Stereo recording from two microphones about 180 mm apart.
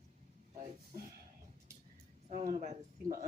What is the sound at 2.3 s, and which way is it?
Speech, 40° right (ahead or behind).